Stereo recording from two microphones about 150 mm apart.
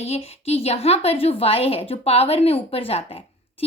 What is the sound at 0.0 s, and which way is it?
A woman's voice, 45° left (ahead or behind).